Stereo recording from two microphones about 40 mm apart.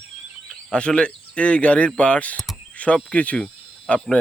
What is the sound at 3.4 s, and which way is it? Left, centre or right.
Cricket, left.